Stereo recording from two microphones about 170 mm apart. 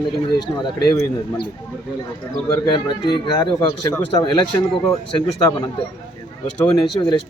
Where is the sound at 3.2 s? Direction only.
25° left (ahead or behind).